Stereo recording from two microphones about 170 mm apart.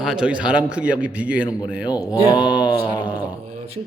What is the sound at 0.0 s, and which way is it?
A man's voice, 5° right (ahead or behind).